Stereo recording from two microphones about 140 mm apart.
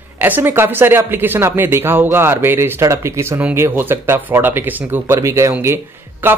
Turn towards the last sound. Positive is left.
turn(degrees=-15)  # may be behind; listen again after turning